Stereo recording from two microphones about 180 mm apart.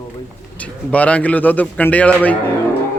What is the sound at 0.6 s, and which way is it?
A man's voice, 10° left (ahead or behind).